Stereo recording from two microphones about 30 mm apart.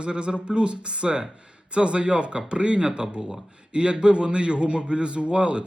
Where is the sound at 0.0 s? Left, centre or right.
Right.